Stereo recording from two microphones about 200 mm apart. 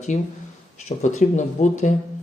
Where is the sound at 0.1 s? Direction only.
35° left (ahead or behind).